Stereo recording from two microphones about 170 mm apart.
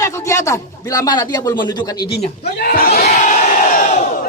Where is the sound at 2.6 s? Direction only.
60° left (ahead or behind).